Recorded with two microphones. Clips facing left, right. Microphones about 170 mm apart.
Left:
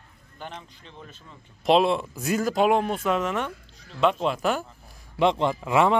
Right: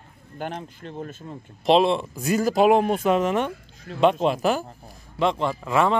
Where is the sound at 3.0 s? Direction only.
25° right (ahead or behind).